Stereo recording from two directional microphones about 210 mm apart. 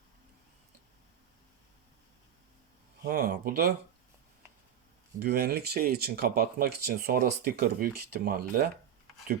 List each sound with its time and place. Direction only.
3.0 s speech: 45° right (ahead or behind)
5.2 s speech: 45° right (ahead or behind)